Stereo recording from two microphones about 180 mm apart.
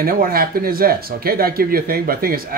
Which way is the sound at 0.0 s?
55° right (ahead or behind).